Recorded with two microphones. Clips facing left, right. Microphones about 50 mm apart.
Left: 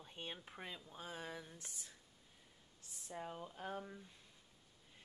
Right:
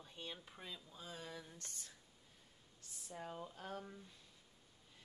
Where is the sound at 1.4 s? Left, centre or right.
Centre.